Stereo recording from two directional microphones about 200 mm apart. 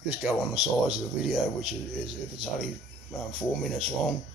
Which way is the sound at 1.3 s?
Centre (ahead or behind).